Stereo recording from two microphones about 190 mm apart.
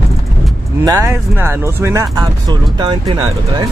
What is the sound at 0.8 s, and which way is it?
Speech, 15° right (ahead or behind).